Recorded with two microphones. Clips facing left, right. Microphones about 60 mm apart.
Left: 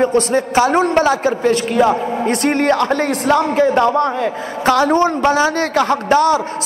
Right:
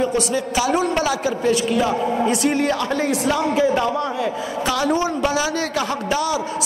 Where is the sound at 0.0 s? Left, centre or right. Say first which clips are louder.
Left 6 dB; left.